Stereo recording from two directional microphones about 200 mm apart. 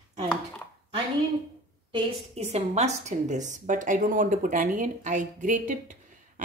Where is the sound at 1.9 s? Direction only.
30° right (ahead or behind).